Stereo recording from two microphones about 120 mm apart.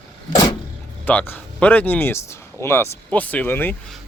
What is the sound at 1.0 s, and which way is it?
Speech, 15° left (ahead or behind).